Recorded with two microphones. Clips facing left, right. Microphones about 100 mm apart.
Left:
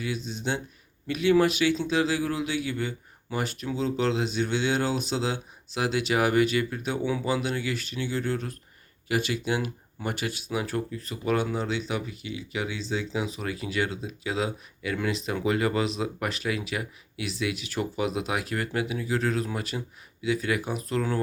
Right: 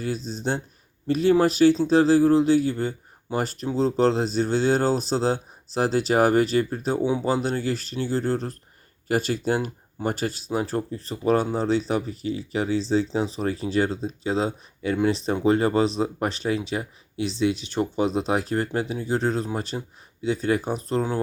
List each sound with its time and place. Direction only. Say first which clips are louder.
0.0 s speech: right 4 dB; 35° right (ahead or behind)